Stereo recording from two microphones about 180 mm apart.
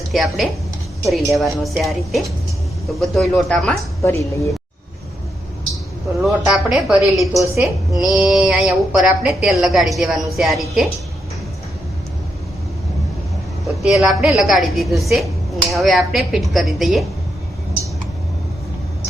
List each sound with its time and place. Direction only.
0.1 s a woman's voice: centre (ahead or behind)
4.0 s a woman's voice: 15° left (ahead or behind)
6.2 s a woman's voice: 5° right (ahead or behind)
13.7 s a woman's voice: 5° right (ahead or behind)